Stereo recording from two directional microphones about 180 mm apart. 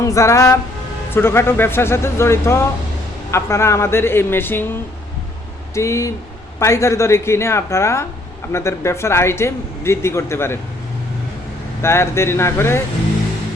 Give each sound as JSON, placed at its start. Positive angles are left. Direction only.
{"t": 0.0, "sound": "speech", "side_deg": 15}
{"t": 11.8, "sound": "speech", "side_deg": 15}